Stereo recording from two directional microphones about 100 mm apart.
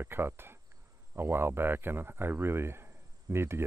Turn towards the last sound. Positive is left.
turn(degrees=-25)  # may be behind; listen again after turning